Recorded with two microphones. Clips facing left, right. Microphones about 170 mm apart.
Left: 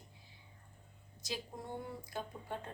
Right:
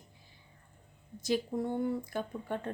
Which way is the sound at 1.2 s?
55° right (ahead or behind).